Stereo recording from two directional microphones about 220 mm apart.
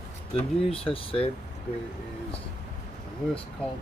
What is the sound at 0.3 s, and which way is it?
Speech, 25° left (ahead or behind).